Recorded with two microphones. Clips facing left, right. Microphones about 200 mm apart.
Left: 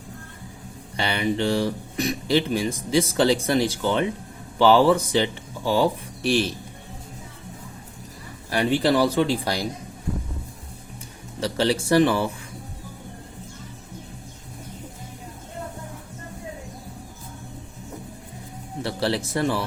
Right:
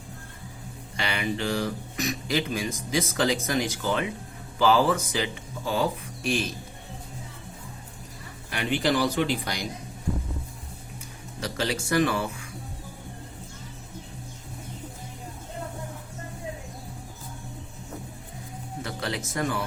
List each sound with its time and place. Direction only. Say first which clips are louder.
0.9 s speech: left 5 dB; 30° left (ahead or behind)
8.4 s speech: left 5 dB; 35° left (ahead or behind)
11.3 s speech: left 7 dB; 30° left (ahead or behind)
18.8 s speech: left 7 dB; 30° left (ahead or behind)